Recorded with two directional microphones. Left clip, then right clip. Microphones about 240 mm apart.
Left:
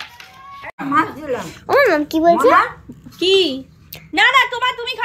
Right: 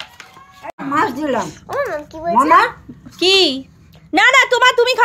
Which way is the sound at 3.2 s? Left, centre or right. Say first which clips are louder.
Right 2 dB; centre.